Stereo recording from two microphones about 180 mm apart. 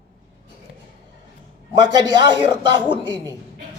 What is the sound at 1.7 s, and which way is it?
Speech, 25° right (ahead or behind).